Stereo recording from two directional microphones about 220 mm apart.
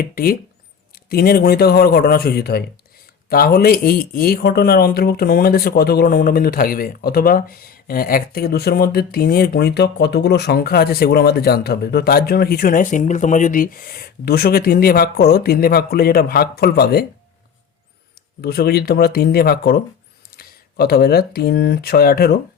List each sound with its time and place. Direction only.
0.0 s speech: 40° left (ahead or behind)
18.4 s speech: 45° left (ahead or behind)